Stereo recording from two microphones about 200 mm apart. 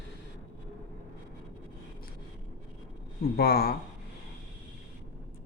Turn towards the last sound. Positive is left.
turn(degrees=50)  # may be behind; listen again after turning